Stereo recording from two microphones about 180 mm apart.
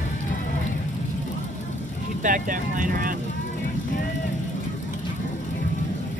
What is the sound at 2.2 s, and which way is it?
Speech, 50° right (ahead or behind).